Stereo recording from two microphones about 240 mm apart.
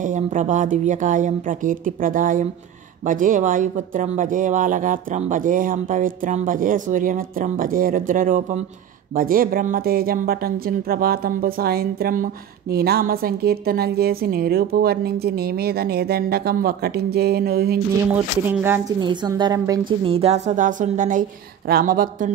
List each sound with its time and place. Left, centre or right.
0.0 s a woman's voice: right
18.5 s a woman's voice: centre; by 22.3 s right